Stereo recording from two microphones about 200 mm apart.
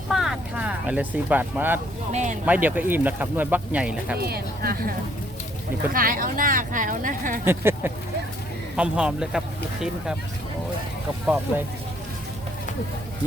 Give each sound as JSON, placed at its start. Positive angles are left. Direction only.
{"t": 0.1, "sound": "speech", "side_deg": 0}
{"t": 2.1, "sound": "speech", "side_deg": -35}
{"t": 2.5, "sound": "speech", "side_deg": -10}
{"t": 4.2, "sound": "speech", "side_deg": -50}
{"t": 7.4, "sound": "speech", "side_deg": -10}